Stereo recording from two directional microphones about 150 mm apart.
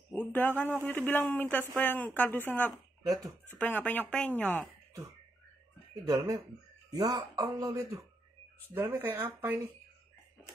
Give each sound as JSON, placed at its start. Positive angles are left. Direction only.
{"t": 0.1, "sound": "a man's voice", "side_deg": 10}
{"t": 5.9, "sound": "speech", "side_deg": -25}